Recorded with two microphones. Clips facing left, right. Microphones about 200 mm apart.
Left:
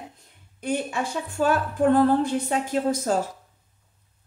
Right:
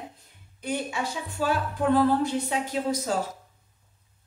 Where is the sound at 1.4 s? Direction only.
50° left (ahead or behind).